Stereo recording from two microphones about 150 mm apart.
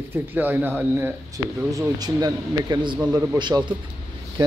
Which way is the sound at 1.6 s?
25° right (ahead or behind).